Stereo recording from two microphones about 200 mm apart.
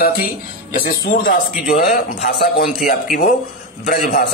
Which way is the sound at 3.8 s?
45° left (ahead or behind).